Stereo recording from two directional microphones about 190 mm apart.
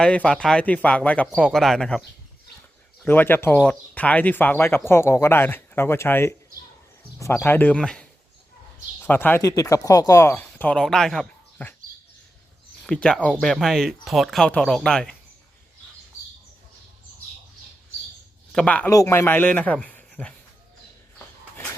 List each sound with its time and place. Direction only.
0.0 s speech: 5° left (ahead or behind)
7.3 s speech: 10° left (ahead or behind)
9.0 s speech: 10° left (ahead or behind)
12.8 s speech: 5° left (ahead or behind)
18.5 s speech: 5° left (ahead or behind)
21.5 s a sound: 10° left (ahead or behind)